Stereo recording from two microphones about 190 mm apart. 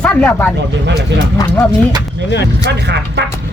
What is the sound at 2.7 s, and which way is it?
Speech, 60° right (ahead or behind).